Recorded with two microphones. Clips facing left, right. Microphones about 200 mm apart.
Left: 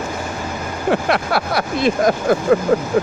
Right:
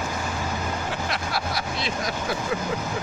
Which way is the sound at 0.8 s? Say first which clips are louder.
Left 12 dB; 65° left (ahead or behind).